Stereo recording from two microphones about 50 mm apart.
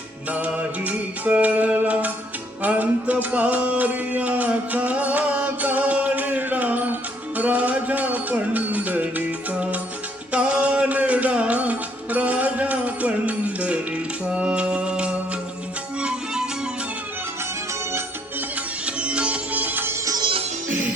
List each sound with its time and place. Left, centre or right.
0.3 s music: right
18.9 s music: right
19.5 s music: right